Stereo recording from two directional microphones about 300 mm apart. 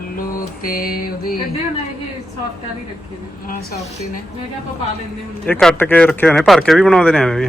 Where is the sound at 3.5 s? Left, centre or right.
Left.